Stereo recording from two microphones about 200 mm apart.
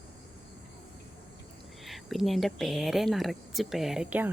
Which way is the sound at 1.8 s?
Centre (ahead or behind).